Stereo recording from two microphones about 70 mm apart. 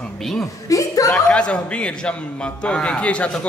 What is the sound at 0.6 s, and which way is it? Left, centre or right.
Speech, left.